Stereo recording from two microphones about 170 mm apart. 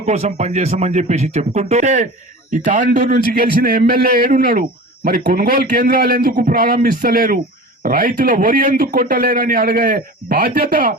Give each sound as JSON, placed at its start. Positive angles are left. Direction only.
{"t": 0.0, "sound": "a man's voice", "side_deg": -40}